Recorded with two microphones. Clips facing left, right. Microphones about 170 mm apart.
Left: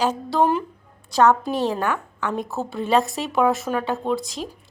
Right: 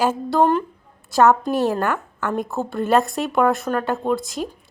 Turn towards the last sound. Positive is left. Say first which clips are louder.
# right 2 dB
turn(degrees=0)  # may be behind; listen again after turning